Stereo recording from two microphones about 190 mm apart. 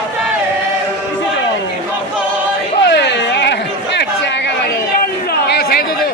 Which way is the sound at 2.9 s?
65° left (ahead or behind).